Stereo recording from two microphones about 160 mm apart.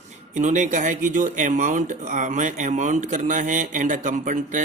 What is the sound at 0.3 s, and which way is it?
A man's voice, 50° right (ahead or behind).